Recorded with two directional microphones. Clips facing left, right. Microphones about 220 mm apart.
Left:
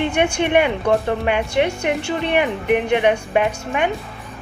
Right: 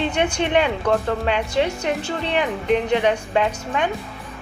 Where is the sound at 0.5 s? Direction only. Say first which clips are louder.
Left 2 dB; 15° left (ahead or behind).